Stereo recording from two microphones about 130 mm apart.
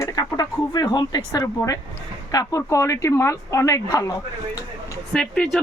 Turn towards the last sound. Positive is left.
turn(degrees=5)  # may be behind; listen again after turning